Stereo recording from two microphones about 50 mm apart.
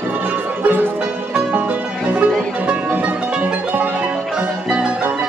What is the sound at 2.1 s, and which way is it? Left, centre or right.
Music, right.